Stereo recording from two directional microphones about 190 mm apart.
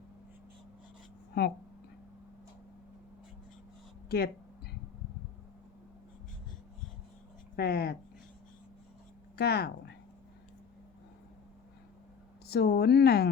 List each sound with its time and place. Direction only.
4.1 s a sound: 55° left (ahead or behind)
7.5 s speech: 55° left (ahead or behind)
9.4 s speech: 60° left (ahead or behind)
12.5 s speech: 55° left (ahead or behind)